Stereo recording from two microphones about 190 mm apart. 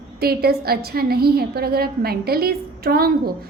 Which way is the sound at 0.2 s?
55° right (ahead or behind).